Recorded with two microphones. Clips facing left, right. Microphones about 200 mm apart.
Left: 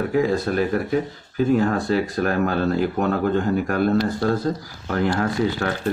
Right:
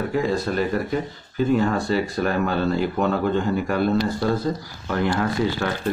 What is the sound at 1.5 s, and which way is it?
Speech, 50° left (ahead or behind).